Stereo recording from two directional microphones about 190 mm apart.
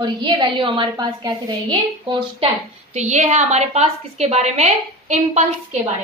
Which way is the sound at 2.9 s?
35° right (ahead or behind).